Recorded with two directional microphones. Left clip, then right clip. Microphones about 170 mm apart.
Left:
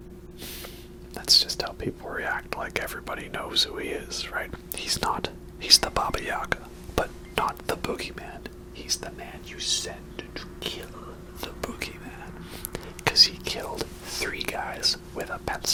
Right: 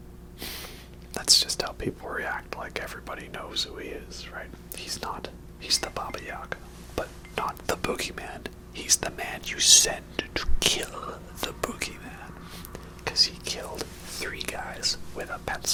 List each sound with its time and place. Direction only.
1.1 s whispering: 10° right (ahead or behind)
2.3 s speech: 20° left (ahead or behind); by 6.6 s 55° left (ahead or behind)
6.9 s whispering: 35° left (ahead or behind)
7.7 s speech: 10° right (ahead or behind)
8.8 s speech: 35° right (ahead or behind)
9.5 s speech: 65° right (ahead or behind)
10.6 s speech: 45° right (ahead or behind)
11.8 s whispering: centre (ahead or behind)
12.7 s whispering: 35° left (ahead or behind)
15.1 s speech: 25° left (ahead or behind)